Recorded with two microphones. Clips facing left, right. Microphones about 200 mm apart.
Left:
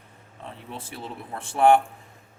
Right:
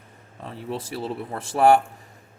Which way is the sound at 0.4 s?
35° right (ahead or behind).